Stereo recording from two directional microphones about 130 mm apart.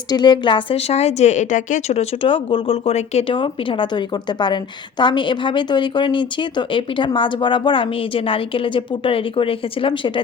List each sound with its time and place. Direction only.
0.1 s a woman's voice: 35° left (ahead or behind)
0.9 s speech: 55° left (ahead or behind)
3.3 s a woman's voice: 40° left (ahead or behind)